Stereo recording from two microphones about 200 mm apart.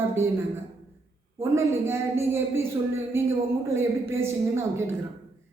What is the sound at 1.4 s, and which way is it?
Speech, 10° right (ahead or behind).